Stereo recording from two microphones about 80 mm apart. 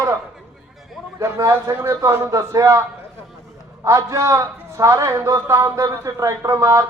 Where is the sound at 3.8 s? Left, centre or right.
Right.